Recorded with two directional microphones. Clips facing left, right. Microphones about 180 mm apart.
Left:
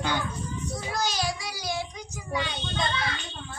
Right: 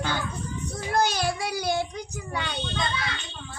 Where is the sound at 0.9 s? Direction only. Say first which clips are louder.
Right 6 dB; 55° right (ahead or behind).